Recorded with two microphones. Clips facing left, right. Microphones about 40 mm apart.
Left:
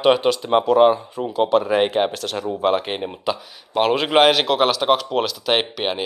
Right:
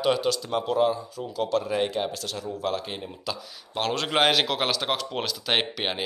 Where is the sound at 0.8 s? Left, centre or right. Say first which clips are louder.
Left 9 dB; left.